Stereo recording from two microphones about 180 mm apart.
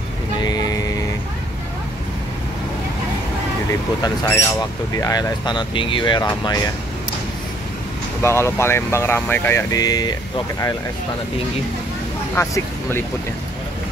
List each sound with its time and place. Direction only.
0.4 s vehicle: 20° left (ahead or behind)
4.0 s speech: 15° left (ahead or behind)
8.2 s speech: 15° left (ahead or behind)
12.4 s speech: 15° left (ahead or behind)